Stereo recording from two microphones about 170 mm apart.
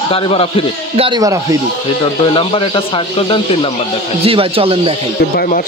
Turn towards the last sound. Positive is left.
turn(degrees=55)  # may be behind; listen again after turning